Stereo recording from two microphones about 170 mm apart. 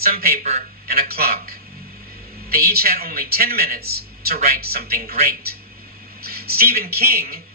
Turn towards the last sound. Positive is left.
turn(degrees=-65)  # may be behind; listen again after turning